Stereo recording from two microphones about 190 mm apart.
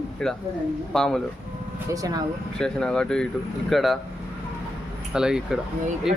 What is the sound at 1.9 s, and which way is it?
Speech, 20° right (ahead or behind).